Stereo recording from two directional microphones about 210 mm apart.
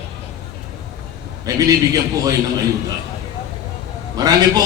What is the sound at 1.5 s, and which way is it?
Speech, 15° right (ahead or behind).